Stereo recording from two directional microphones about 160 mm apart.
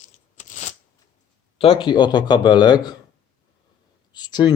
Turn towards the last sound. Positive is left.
turn(degrees=25)  # may be behind; listen again after turning